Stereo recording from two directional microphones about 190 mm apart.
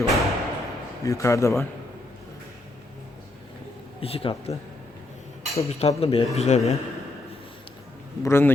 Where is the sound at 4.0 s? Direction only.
30° left (ahead or behind).